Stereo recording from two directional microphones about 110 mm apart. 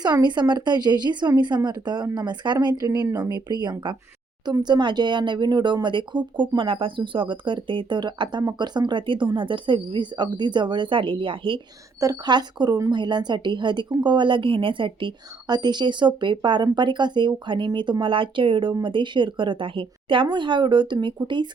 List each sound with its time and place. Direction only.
0.0 s speech: 40° right (ahead or behind)
11.9 s speech: 35° right (ahead or behind)